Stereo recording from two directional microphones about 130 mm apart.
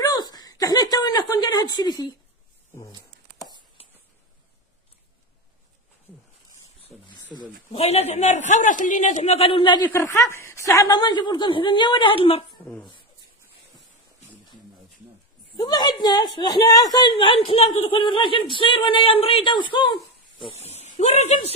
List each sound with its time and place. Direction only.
0.0 s a sound: 30° left (ahead or behind)
7.7 s a man's voice: 50° left (ahead or behind); by 9.9 s 35° left (ahead or behind)
9.9 s a woman's voice: 20° left (ahead or behind); by 12.5 s 45° left (ahead or behind)
15.5 s a woman's voice: 35° left (ahead or behind)
20.6 s speech: 55° left (ahead or behind)